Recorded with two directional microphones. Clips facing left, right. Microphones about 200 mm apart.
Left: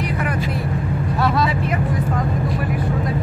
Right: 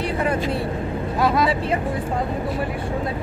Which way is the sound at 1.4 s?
30° right (ahead or behind).